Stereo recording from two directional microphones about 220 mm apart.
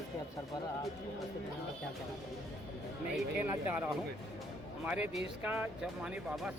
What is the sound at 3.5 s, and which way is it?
A man's voice, 10° right (ahead or behind).